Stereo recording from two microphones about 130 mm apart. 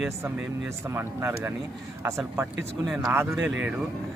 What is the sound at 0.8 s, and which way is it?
A man's voice, 20° right (ahead or behind).